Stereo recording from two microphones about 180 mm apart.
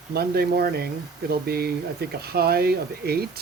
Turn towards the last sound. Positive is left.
turn(degrees=-60)  # may be behind; listen again after turning